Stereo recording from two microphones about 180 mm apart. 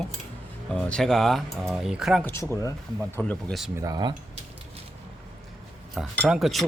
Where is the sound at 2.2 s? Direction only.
15° left (ahead or behind).